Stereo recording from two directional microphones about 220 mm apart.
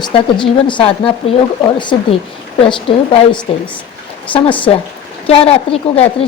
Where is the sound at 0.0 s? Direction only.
20° left (ahead or behind).